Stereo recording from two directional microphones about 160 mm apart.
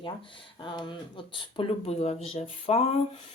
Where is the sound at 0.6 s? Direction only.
30° left (ahead or behind).